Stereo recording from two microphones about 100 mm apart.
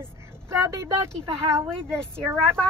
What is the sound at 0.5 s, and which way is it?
Speech, 30° right (ahead or behind).